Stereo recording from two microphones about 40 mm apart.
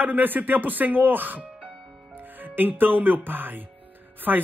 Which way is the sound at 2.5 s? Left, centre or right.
Right.